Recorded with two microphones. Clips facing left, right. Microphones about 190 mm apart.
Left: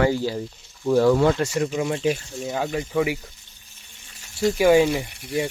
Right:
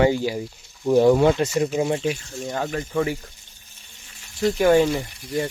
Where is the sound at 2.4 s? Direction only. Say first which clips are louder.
Left 1 dB; 5° left (ahead or behind).